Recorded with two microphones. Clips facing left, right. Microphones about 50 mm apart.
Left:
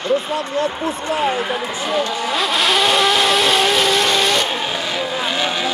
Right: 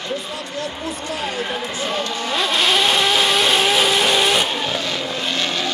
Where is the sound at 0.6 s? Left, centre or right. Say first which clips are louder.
Left 5 dB; left.